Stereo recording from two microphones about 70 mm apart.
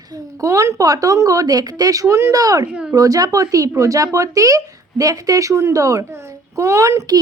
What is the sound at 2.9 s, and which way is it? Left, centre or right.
A woman's voice, right.